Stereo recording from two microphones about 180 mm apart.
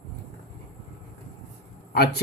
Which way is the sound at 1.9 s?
60° left (ahead or behind).